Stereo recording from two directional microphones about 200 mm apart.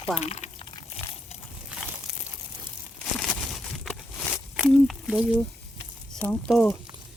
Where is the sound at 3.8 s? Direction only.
Centre (ahead or behind).